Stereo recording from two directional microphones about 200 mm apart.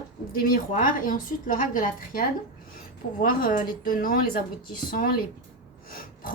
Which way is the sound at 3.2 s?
45° left (ahead or behind).